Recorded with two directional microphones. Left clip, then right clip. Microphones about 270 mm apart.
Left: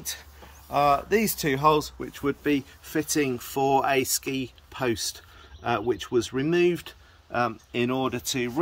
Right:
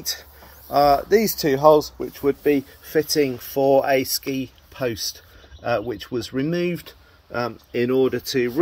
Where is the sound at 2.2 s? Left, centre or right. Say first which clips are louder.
Right 7 dB; left.